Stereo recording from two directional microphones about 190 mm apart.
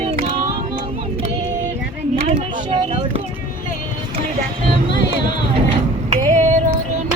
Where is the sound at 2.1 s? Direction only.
30° right (ahead or behind).